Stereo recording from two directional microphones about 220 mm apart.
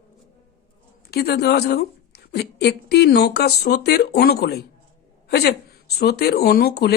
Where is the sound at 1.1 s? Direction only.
45° left (ahead or behind).